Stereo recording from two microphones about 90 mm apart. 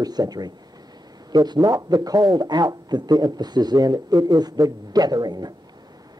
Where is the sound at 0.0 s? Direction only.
45° right (ahead or behind).